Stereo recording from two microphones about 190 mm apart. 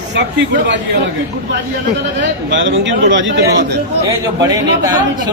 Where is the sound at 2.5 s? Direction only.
80° right.